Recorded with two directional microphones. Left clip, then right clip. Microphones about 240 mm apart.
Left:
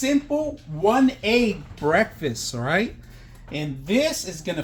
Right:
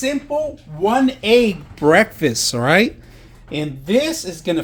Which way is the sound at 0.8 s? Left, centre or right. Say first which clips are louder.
Right 4 dB; right.